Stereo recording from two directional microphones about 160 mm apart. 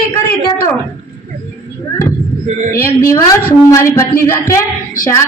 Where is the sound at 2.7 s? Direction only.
20° left (ahead or behind).